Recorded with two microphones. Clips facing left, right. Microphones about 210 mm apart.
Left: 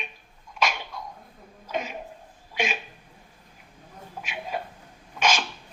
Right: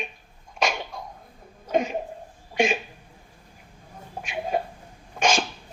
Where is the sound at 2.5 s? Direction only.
50° right (ahead or behind).